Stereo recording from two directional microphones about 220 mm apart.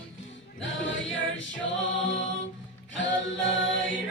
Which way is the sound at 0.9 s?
55° left (ahead or behind).